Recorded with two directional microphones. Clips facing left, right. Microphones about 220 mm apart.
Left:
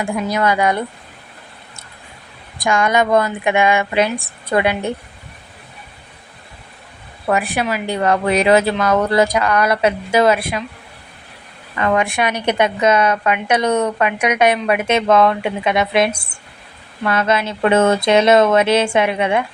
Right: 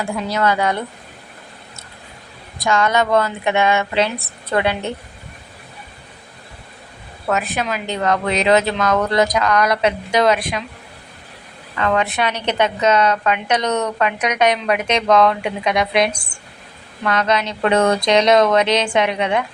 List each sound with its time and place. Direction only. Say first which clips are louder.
0.0 s a woman's voice: left 1 dB; 15° left (ahead or behind)
2.6 s a woman's voice: left 1 dB; 15° left (ahead or behind)
7.3 s a woman's voice: left 3 dB; 10° left (ahead or behind)
11.8 s a woman's voice: left 2 dB; 10° left (ahead or behind)